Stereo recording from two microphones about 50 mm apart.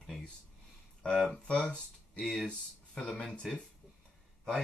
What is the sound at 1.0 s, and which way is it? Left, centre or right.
Speech, centre.